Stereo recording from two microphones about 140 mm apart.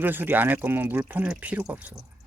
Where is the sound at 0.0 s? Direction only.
15° right (ahead or behind).